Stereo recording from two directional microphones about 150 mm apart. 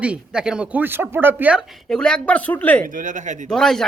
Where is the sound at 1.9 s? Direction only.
5° left (ahead or behind).